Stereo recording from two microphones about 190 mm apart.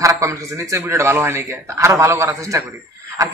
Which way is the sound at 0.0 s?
15° right (ahead or behind).